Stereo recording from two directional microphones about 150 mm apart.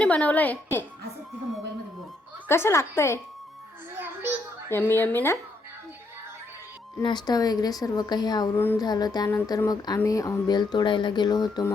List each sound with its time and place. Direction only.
0.0 s a woman's voice: 10° left (ahead or behind)
2.5 s a woman's voice: 15° left (ahead or behind)
3.9 s a sound: 15° right (ahead or behind)
4.7 s a woman's voice: 15° left (ahead or behind)
7.0 s speech: 30° left (ahead or behind)
8.5 s a woman's voice: 15° left (ahead or behind)
8.8 s speech: 25° left (ahead or behind)